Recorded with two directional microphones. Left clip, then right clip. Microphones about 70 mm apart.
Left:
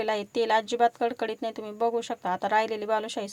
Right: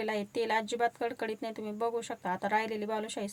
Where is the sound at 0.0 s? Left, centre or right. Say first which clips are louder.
Left 6 dB; left.